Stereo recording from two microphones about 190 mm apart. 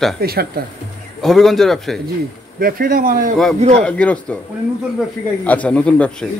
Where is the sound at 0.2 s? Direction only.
55° right (ahead or behind).